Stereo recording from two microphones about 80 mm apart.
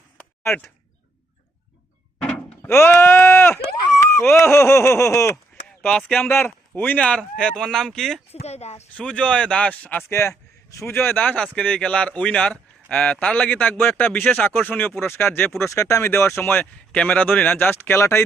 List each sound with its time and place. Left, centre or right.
2.6 s a sound: left
5.8 s speech: centre
6.1 s speech: left
10.0 s a man's voice: left
11.2 s a man's voice: centre
15.7 s a sound: left
16.4 s a man's voice: left
16.9 s a man's voice: centre; by 18.2 s left